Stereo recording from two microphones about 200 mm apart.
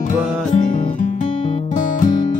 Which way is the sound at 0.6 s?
35° left (ahead or behind).